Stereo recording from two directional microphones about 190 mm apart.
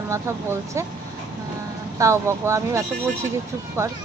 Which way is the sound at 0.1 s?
15° right (ahead or behind).